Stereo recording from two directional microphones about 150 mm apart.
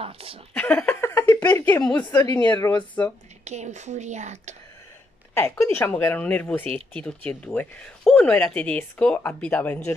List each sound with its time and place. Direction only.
0.0 s speech: 40° right (ahead or behind)
0.6 s a sound: 10° left (ahead or behind)
2.0 s speech: 15° left (ahead or behind)
3.4 s speech: 50° right (ahead or behind)
5.7 s speech: 15° left (ahead or behind)